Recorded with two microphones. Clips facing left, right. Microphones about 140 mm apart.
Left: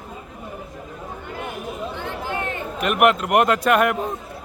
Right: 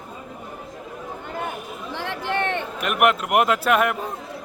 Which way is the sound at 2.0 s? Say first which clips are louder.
Right 7 dB; 80° right.